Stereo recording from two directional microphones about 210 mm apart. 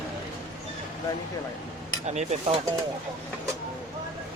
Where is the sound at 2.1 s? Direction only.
30° right (ahead or behind).